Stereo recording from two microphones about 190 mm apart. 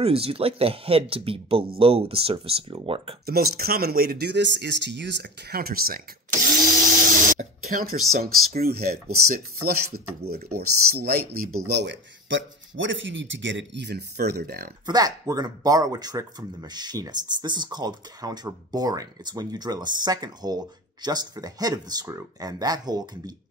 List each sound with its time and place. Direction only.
0.0 s speech: 30° right (ahead or behind)
3.3 s speech: 55° right (ahead or behind)
7.3 s speech: 45° right (ahead or behind)
11.5 s speech: 65° right (ahead or behind)
14.9 s speech: 20° right (ahead or behind)